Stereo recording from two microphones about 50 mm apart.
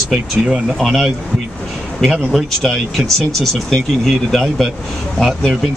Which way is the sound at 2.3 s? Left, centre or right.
Centre.